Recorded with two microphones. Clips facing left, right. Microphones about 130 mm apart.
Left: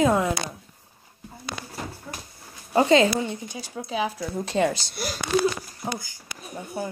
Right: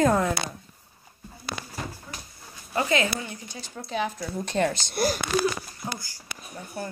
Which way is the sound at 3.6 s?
5° left (ahead or behind).